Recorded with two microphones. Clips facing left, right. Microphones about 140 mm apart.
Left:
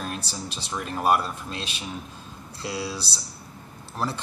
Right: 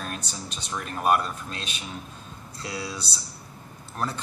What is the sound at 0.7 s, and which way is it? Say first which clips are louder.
Speech: left 1 dB; 5° left (ahead or behind).